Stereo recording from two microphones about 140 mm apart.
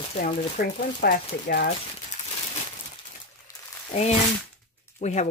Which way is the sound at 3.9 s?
50° left (ahead or behind).